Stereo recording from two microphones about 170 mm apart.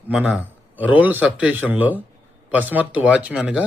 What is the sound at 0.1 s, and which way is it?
A man's voice, 5° right (ahead or behind).